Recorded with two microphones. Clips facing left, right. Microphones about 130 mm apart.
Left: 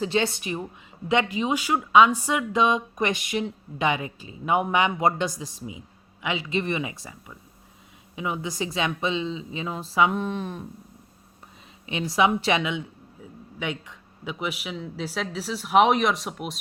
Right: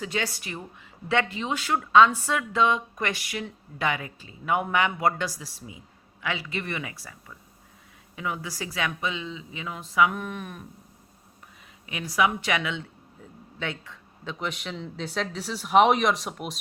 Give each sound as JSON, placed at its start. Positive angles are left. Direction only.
{"t": 0.0, "sound": "speech", "side_deg": 25}
{"t": 11.9, "sound": "speech", "side_deg": 25}